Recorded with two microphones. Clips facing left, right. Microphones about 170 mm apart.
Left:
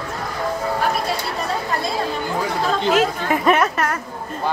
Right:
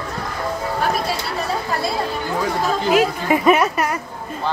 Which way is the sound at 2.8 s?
10° right (ahead or behind).